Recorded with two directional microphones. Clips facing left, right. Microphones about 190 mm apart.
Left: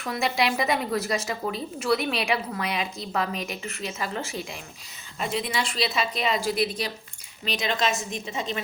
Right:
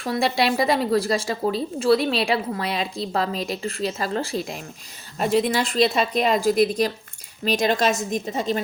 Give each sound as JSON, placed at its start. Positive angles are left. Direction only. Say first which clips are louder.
{"t": 0.0, "sound": "a woman's voice", "louder": "right 4 dB", "side_deg": -30}